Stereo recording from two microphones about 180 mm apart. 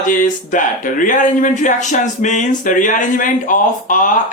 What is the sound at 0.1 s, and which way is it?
Speech, 45° left (ahead or behind).